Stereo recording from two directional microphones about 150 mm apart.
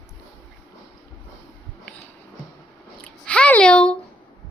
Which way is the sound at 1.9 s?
10° left (ahead or behind).